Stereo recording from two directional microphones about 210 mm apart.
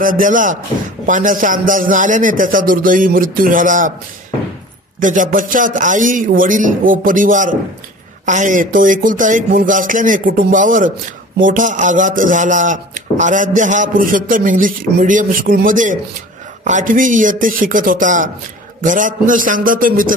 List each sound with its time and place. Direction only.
0.0 s speech: 40° right (ahead or behind)
5.0 s speech: 40° right (ahead or behind)